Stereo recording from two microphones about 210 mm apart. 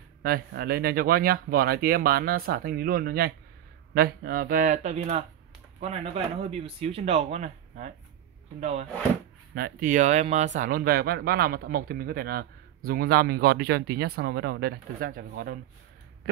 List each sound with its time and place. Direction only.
0.2 s speech: 45° right (ahead or behind)
9.6 s speech: 45° right (ahead or behind)